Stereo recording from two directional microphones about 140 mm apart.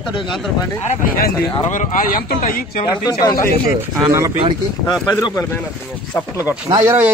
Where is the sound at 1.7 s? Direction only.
70° left (ahead or behind).